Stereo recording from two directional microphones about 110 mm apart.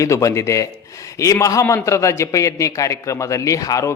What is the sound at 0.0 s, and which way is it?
A man's voice, 30° left (ahead or behind).